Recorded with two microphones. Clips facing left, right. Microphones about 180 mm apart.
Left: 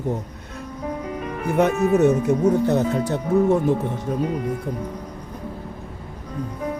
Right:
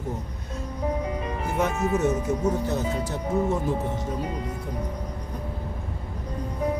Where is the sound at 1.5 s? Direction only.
65° left (ahead or behind).